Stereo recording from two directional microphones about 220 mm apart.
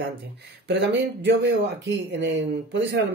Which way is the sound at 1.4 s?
50° right (ahead or behind).